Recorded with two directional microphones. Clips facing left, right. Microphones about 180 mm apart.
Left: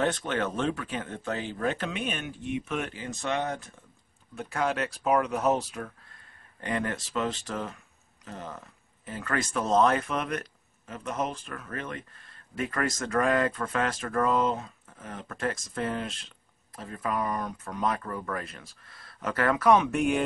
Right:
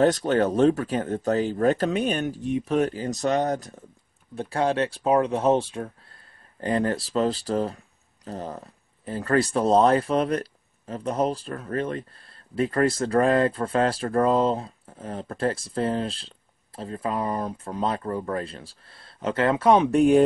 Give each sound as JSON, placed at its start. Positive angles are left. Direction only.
{"t": 0.0, "sound": "speech", "side_deg": -40}